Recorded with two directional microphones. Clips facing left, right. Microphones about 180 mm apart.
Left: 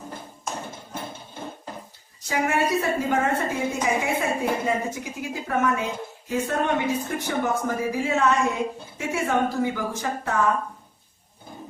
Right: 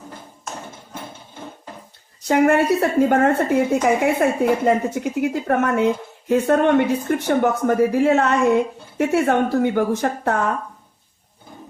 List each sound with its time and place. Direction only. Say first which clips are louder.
2.2 s a woman's voice: right 8 dB; 60° right (ahead or behind)